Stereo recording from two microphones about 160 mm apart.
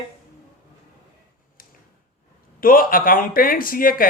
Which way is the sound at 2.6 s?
60° left (ahead or behind).